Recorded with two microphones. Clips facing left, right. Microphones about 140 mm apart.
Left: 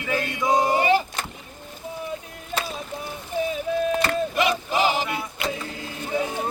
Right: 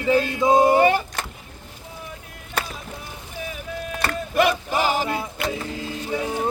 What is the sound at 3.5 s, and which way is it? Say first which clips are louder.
Music: left 8 dB; 30° left (ahead or behind).